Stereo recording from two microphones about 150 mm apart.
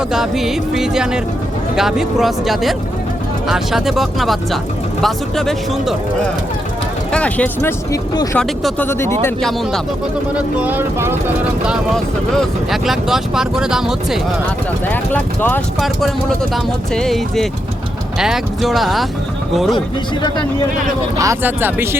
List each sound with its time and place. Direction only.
0.1 s speech: 5° right (ahead or behind)
7.1 s speech: 10° left (ahead or behind)
8.1 s speech: 25° left (ahead or behind)
8.4 s speech: 5° left (ahead or behind)
8.9 s speech: 15° left (ahead or behind)
9.4 s speech: 5° left (ahead or behind)
10.3 s speech: 10° right (ahead or behind)
12.3 s speech: centre (ahead or behind)
14.8 s speech: 10° left (ahead or behind)
15.8 s speech: centre (ahead or behind)
21.2 s speech: 15° right (ahead or behind)